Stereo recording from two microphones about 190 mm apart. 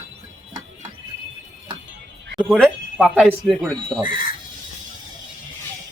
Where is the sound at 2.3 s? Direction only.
Centre (ahead or behind).